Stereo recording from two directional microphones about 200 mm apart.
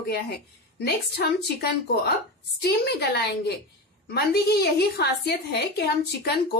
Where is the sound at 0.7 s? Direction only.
55° left (ahead or behind).